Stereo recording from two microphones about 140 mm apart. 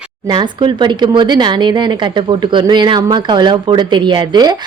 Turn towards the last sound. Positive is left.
turn(degrees=-30)  # may be behind; listen again after turning